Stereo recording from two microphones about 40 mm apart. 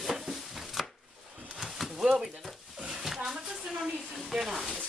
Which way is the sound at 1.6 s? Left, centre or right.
Centre.